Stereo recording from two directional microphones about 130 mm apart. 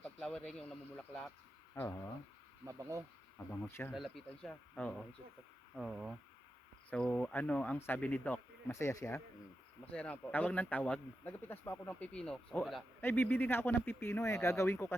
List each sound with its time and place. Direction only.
0.0 s speech: 5° left (ahead or behind)
1.7 s speech: 15° left (ahead or behind)
2.6 s speech: 20° right (ahead or behind)
3.5 s speech: 15° left (ahead or behind)
3.9 s speech: centre (ahead or behind); by 9.2 s 20° left (ahead or behind)
9.9 s speech: 10° left (ahead or behind)
13.0 s speech: 15° left (ahead or behind)